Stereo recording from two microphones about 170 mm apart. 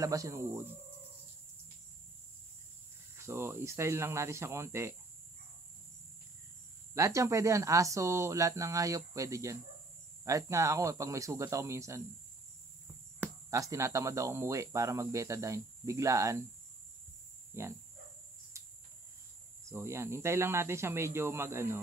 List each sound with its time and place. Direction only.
0.0 s speech: 20° right (ahead or behind)
3.2 s speech: 15° right (ahead or behind)
6.9 s speech: 20° right (ahead or behind)
13.2 s speech: 20° right (ahead or behind)
19.7 s speech: 15° right (ahead or behind)